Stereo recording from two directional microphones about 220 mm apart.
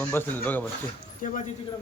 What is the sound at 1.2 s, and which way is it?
Speech, 35° left (ahead or behind).